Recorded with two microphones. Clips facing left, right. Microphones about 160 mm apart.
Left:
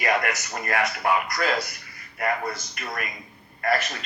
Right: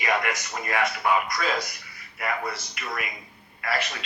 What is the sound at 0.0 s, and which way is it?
Speech, 50° left (ahead or behind).